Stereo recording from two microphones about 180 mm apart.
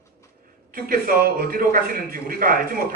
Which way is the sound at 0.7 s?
50° right (ahead or behind).